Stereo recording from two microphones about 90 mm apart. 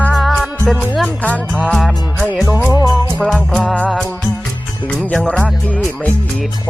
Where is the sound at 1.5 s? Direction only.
Centre (ahead or behind).